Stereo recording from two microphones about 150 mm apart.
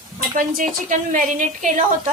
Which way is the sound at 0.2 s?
65° right (ahead or behind).